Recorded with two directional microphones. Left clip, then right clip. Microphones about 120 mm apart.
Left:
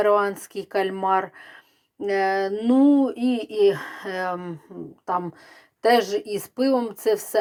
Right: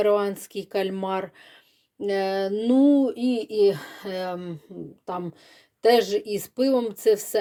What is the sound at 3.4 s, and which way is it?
Speech, 5° left (ahead or behind).